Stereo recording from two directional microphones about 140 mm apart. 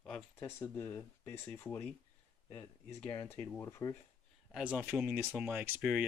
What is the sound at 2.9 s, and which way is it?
Speech, 15° left (ahead or behind).